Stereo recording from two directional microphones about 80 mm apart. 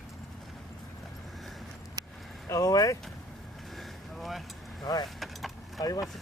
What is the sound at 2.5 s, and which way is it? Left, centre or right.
Vehicle, left.